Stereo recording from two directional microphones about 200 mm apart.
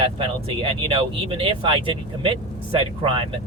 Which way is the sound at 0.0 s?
30° right (ahead or behind).